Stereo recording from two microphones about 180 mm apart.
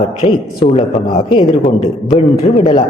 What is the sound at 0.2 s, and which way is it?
A man's voice, 40° left (ahead or behind).